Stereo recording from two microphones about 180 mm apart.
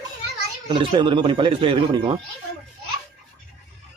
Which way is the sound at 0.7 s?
30° right (ahead or behind).